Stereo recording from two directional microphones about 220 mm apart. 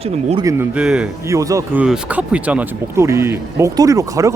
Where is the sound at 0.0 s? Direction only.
25° right (ahead or behind).